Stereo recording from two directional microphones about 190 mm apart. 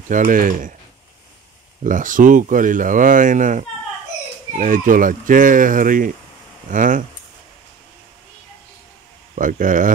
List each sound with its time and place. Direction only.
0.1 s speech: 45° right (ahead or behind)
1.8 s speech: 45° right (ahead or behind)
9.3 s speech: 45° right (ahead or behind)